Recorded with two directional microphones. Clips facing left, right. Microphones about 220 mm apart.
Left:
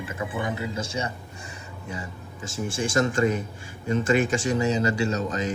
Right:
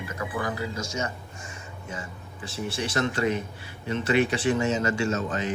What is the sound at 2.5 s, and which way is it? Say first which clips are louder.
A man's voice: left 4 dB; 45° left (ahead or behind).